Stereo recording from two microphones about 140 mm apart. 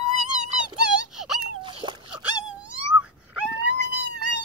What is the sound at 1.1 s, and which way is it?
Wail, 5° right (ahead or behind).